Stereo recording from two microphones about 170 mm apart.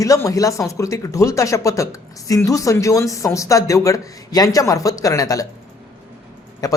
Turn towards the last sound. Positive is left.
turn(degrees=20)  # may be behind; listen again after turning